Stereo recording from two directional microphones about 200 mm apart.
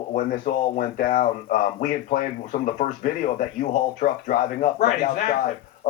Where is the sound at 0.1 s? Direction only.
45° left (ahead or behind).